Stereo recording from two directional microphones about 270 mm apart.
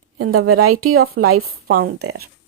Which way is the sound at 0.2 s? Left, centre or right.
Right.